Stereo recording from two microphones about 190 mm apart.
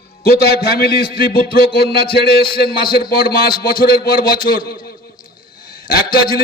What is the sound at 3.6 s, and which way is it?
A man's voice, 50° left (ahead or behind).